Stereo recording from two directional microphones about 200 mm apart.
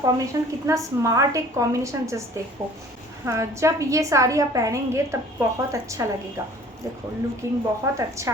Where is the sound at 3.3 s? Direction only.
15° right (ahead or behind).